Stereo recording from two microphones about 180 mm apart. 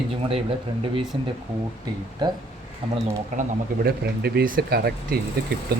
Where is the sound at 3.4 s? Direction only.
60° right (ahead or behind).